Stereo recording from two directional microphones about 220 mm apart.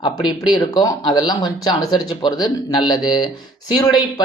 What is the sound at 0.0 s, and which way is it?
Speech, 20° left (ahead or behind).